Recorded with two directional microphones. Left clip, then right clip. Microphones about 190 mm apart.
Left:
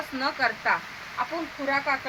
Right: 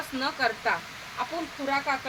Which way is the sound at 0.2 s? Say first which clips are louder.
Left 2 dB; 25° right (ahead or behind).